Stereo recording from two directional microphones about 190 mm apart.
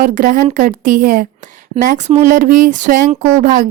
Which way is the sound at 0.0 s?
45° right (ahead or behind).